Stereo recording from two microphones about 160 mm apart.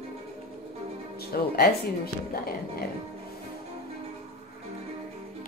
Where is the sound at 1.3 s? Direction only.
70° left (ahead or behind).